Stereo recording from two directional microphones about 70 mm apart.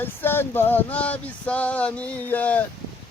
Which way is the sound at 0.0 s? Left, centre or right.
Left.